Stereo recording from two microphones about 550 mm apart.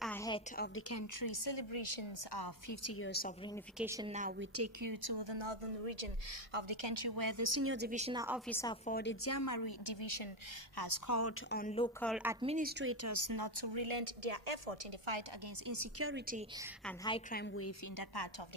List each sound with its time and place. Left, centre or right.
0.0 s a sound: centre
0.6 s a woman's voice: left
1.2 s speech: left
2.7 s a woman's voice: left
3.7 s a woman's voice: centre
4.8 s speech: right
6.5 s a woman's voice: right; by 10.2 s left
10.8 s speech: left
11.5 s speech: centre; by 15.1 s right
15.6 s speech: right
16.8 s a woman's voice: centre
17.9 s speech: left